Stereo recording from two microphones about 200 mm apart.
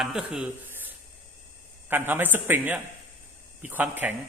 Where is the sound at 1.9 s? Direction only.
10° right (ahead or behind).